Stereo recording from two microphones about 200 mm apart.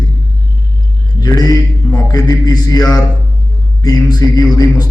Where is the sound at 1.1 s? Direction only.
20° left (ahead or behind).